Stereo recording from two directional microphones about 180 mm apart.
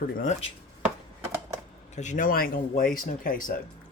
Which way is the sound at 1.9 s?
40° left (ahead or behind).